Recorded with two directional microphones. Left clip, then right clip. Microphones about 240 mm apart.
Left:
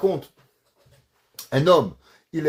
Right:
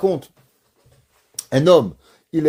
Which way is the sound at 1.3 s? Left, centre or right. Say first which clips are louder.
Right 4 dB; right.